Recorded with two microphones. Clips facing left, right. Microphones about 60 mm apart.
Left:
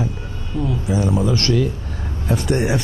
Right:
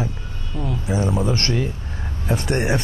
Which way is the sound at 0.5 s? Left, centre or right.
Centre.